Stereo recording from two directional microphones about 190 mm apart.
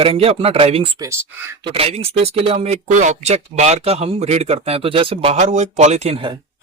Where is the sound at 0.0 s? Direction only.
30° right (ahead or behind).